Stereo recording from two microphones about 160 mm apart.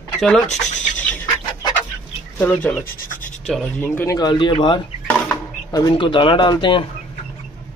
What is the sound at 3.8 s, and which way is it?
Speech, 15° left (ahead or behind).